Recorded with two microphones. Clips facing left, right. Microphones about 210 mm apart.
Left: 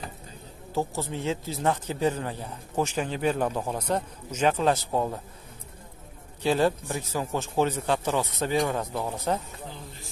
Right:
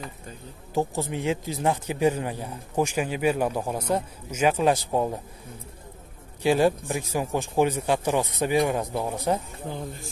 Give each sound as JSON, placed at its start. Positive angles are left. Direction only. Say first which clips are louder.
{"t": 0.7, "sound": "speech", "louder": "right 3 dB", "side_deg": -15}
{"t": 6.4, "sound": "speech", "louder": "right 3 dB", "side_deg": -10}
{"t": 9.7, "sound": "speech", "louder": "right 8 dB", "side_deg": -50}